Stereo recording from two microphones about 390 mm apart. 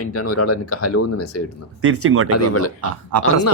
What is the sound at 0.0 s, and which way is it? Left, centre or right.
Speech, left.